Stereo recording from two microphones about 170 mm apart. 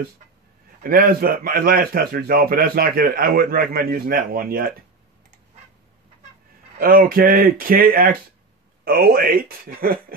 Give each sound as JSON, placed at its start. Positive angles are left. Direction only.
{"t": 0.8, "sound": "a man's voice", "side_deg": -60}
{"t": 6.8, "sound": "a man's voice", "side_deg": -60}